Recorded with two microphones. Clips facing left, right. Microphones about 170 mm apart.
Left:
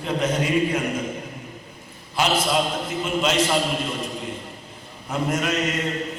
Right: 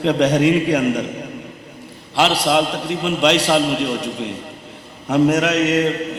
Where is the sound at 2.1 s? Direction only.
75° right (ahead or behind).